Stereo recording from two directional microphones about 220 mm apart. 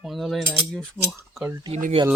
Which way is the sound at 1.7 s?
30° right (ahead or behind).